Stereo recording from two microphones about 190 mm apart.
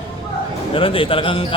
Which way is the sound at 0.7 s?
30° left (ahead or behind).